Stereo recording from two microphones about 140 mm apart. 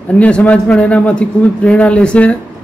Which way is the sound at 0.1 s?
10° left (ahead or behind).